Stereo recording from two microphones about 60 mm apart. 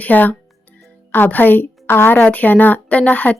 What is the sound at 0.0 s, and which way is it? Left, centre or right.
Speech, left.